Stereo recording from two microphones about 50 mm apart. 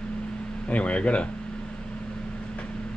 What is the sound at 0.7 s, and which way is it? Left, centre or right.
Speech, left.